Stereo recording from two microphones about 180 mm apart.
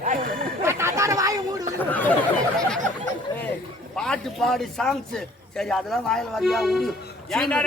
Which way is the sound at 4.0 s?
5° left (ahead or behind).